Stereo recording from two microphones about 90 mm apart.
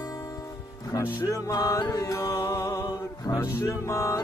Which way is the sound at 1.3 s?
35° left (ahead or behind).